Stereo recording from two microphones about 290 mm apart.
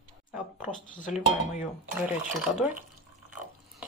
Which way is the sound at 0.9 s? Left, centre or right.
Left.